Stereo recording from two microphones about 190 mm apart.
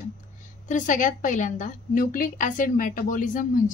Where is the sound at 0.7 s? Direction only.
40° left (ahead or behind).